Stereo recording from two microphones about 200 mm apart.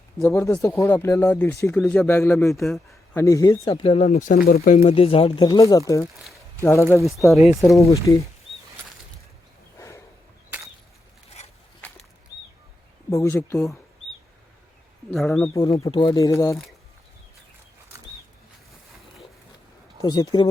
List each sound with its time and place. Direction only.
0.2 s speech: 15° left (ahead or behind)
2.6 s speech: centre (ahead or behind)
3.8 s speech: 30° left (ahead or behind)
4.8 s speech: 30° left (ahead or behind)
7.0 s speech: centre (ahead or behind)
8.0 s speech: 15° left (ahead or behind)
9.7 s a sound: 15° left (ahead or behind)
11.4 s a sound: 35° left (ahead or behind)
13.1 s speech: 10° left (ahead or behind)
15.1 s speech: centre (ahead or behind)
15.5 s speech: 15° left (ahead or behind)
20.0 s speech: 20° left (ahead or behind)